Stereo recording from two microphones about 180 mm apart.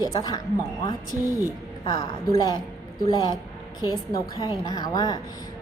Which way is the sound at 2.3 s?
20° left (ahead or behind).